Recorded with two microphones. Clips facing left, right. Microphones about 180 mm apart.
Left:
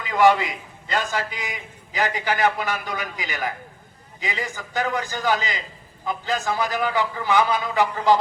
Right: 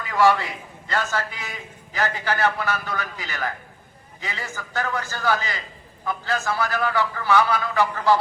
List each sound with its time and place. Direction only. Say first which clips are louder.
0.0 s a man's voice: left 2 dB; 20° left (ahead or behind)